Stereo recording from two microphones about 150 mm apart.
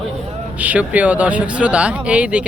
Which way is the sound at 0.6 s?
10° right (ahead or behind).